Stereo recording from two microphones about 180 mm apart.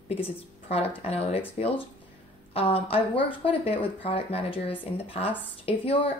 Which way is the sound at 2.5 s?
30° left (ahead or behind).